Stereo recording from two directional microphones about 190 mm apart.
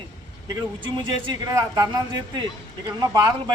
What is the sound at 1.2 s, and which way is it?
A man's voice, 20° right (ahead or behind).